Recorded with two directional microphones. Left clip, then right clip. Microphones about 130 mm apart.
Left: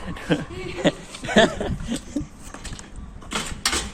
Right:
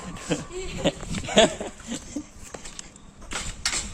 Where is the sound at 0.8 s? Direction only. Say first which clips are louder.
Left 4 dB; 25° right (ahead or behind).